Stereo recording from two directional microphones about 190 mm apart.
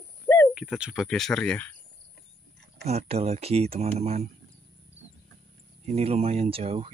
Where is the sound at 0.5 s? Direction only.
5° right (ahead or behind).